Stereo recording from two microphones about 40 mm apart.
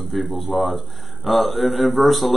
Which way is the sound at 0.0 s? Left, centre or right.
Centre.